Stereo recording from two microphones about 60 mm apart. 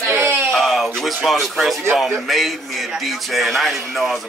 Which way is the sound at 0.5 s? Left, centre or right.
Centre.